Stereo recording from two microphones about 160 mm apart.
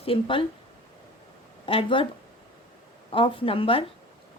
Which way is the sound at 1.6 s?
35° left (ahead or behind).